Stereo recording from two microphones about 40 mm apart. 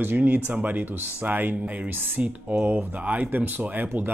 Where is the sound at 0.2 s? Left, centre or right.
Right.